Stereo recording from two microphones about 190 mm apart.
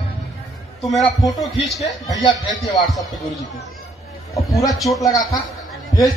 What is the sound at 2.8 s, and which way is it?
Speech, centre (ahead or behind).